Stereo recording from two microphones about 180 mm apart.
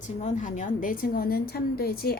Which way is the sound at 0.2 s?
45° left (ahead or behind).